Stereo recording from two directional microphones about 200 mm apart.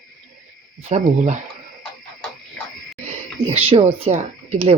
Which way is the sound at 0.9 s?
35° right (ahead or behind).